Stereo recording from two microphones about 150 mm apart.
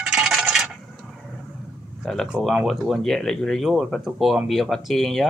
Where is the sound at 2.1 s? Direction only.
Centre (ahead or behind).